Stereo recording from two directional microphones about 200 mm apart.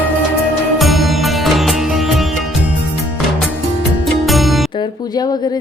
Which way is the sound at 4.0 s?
Centre (ahead or behind).